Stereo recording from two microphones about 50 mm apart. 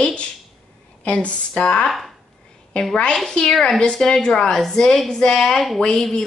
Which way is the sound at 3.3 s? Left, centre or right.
Centre.